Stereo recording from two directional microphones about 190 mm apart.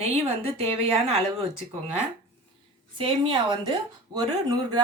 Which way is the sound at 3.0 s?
25° right (ahead or behind).